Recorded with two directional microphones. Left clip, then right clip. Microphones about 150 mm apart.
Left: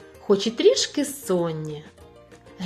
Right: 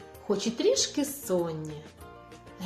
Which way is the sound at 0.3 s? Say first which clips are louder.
Left 8 dB; 45° left (ahead or behind).